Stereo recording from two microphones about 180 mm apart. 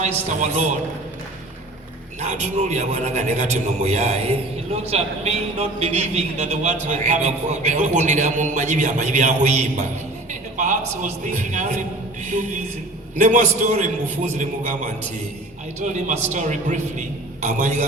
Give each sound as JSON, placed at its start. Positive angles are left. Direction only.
{"t": 0.0, "sound": "a man's voice", "side_deg": -45}
{"t": 2.4, "sound": "a man's voice", "side_deg": -40}
{"t": 15.8, "sound": "a man's voice", "side_deg": -45}